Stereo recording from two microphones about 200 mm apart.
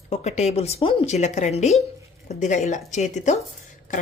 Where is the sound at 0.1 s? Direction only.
35° left (ahead or behind).